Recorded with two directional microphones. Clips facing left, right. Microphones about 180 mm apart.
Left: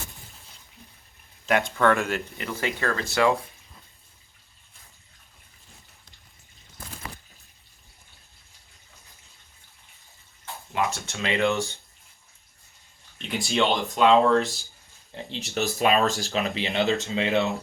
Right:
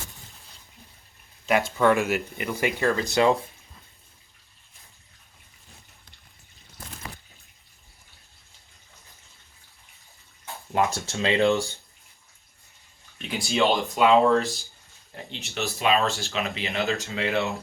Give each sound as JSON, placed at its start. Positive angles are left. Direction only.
{"t": 1.5, "sound": "speech", "side_deg": 0}
{"t": 10.7, "sound": "speech", "side_deg": -35}
{"t": 13.2, "sound": "speech", "side_deg": 0}
{"t": 15.1, "sound": "speech", "side_deg": 35}
{"t": 17.1, "sound": "speech", "side_deg": 20}